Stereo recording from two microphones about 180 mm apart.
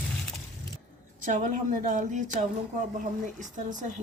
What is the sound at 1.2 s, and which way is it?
Speech, 45° right (ahead or behind).